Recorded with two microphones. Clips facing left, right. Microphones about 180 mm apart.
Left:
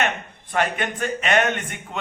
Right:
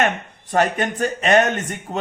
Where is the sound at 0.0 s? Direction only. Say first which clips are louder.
Right 4 dB; 40° right (ahead or behind).